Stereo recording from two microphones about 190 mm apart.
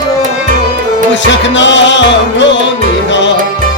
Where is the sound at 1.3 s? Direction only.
75° left (ahead or behind).